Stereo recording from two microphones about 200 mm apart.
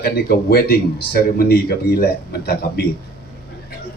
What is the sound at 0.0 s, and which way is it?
Speech, 50° left (ahead or behind).